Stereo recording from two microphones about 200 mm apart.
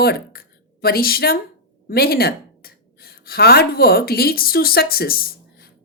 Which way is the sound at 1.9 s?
50° left (ahead or behind).